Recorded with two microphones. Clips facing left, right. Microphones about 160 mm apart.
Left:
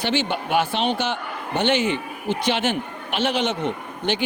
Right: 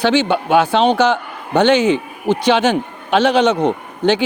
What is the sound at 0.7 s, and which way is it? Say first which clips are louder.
Speech: right 10 dB; 90° right.